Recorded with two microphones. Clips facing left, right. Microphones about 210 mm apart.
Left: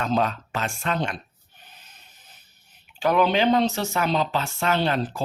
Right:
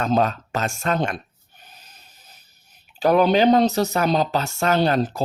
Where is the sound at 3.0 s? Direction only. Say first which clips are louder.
Right 4 dB; 40° right (ahead or behind).